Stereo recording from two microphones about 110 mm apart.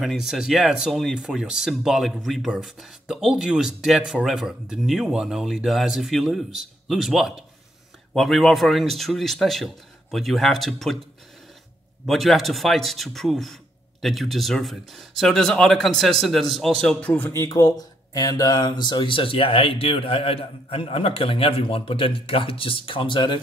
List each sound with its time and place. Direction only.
0.0 s speech: 5° right (ahead or behind)
12.1 s speech: centre (ahead or behind)
16.9 s speech: 15° left (ahead or behind)
17.4 s speech: 35° left (ahead or behind)